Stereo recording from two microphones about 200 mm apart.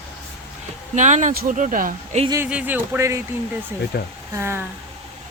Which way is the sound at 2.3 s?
10° right (ahead or behind).